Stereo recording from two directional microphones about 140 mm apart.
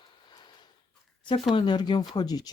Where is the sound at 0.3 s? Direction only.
30° left (ahead or behind).